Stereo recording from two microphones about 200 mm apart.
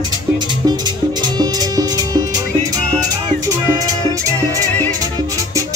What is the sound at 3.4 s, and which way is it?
Music, 15° right (ahead or behind).